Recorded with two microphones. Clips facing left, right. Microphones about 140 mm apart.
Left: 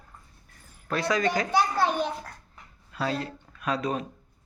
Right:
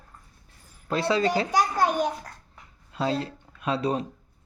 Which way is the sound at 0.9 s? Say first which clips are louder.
Right 2 dB; 30° right (ahead or behind).